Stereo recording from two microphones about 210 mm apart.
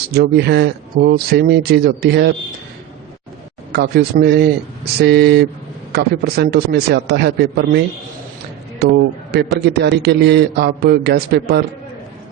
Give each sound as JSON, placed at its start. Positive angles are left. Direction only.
{"t": 0.1, "sound": "speech", "side_deg": -50}
{"t": 3.7, "sound": "speech", "side_deg": -50}
{"t": 9.6, "sound": "speech", "side_deg": -50}